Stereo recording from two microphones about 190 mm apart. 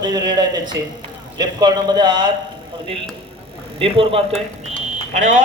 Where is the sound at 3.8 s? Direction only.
30° right (ahead or behind).